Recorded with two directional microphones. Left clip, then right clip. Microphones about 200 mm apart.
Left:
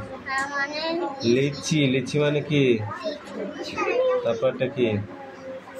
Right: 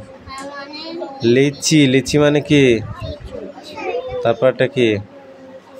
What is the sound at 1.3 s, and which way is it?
Speech, 45° right (ahead or behind).